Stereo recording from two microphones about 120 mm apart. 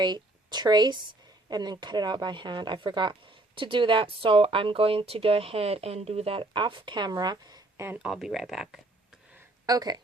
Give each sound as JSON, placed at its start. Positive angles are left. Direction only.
{"t": 0.0, "sound": "a woman's voice", "side_deg": -35}
{"t": 7.9, "sound": "speech", "side_deg": -5}
{"t": 9.6, "sound": "speech", "side_deg": -30}